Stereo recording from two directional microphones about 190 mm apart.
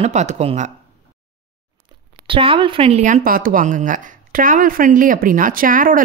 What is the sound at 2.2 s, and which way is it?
Speech, 25° right (ahead or behind).